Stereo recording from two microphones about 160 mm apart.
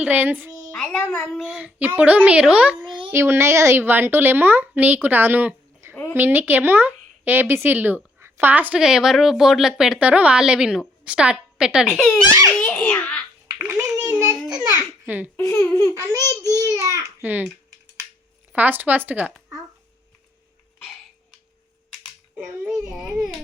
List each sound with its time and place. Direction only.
0.0 s speech: 10° right (ahead or behind)
0.7 s a child's voice: 5° left (ahead or behind)
1.2 s speech: centre (ahead or behind)
5.9 s a woman's voice: 15° left (ahead or behind)
6.1 s speech: 10° right (ahead or behind)
12.5 s baby laughter: 10° left (ahead or behind)
13.6 s a sound: 15° right (ahead or behind)
15.0 s a child's voice: 10° right (ahead or behind)
15.4 s speech: 20° left (ahead or behind)
16.0 s a child's voice: 20° right (ahead or behind)
18.5 s speech: 10° right (ahead or behind)
22.4 s speech: 10° right (ahead or behind)